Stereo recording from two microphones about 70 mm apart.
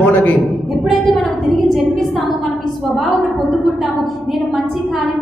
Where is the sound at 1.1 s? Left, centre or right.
Centre.